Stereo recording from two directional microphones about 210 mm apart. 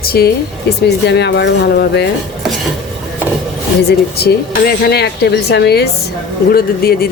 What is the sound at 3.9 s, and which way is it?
Speech, 50° left (ahead or behind).